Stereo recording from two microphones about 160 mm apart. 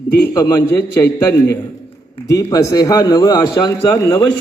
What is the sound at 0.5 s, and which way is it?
A man's voice, 15° left (ahead or behind).